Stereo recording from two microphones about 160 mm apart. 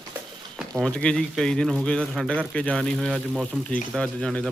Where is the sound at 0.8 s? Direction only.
5° left (ahead or behind).